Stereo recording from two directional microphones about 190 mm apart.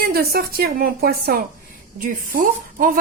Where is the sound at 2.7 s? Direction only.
45° right (ahead or behind).